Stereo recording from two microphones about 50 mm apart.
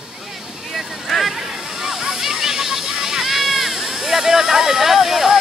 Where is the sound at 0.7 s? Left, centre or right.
Centre.